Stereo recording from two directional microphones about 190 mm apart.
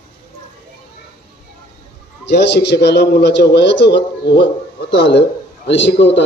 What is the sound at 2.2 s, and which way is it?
A man's voice, 65° left (ahead or behind).